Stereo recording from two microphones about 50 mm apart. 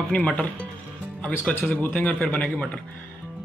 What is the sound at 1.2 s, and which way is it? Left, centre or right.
A man's voice, left.